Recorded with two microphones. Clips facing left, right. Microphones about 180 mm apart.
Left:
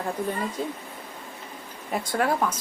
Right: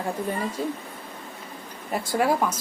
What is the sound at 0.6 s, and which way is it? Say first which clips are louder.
Speech: right 2 dB; centre (ahead or behind).